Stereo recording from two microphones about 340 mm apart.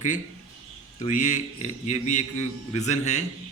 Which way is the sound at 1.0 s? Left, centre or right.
Left.